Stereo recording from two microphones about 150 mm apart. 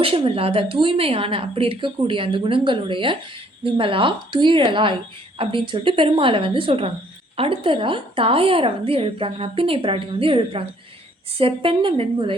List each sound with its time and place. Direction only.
0.0 s a woman's voice: 40° right (ahead or behind)